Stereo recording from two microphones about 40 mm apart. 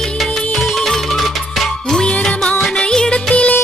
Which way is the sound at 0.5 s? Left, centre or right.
Centre.